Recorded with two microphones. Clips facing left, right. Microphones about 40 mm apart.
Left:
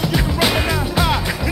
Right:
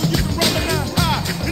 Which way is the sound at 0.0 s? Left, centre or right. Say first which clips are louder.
Left 1 dB; centre.